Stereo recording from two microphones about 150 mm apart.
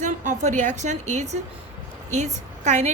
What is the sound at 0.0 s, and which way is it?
A woman's voice, 55° right (ahead or behind).